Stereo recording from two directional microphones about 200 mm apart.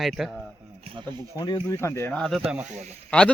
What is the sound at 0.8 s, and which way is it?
Speech, 25° right (ahead or behind).